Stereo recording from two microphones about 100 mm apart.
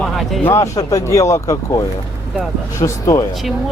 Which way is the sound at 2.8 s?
30° left (ahead or behind).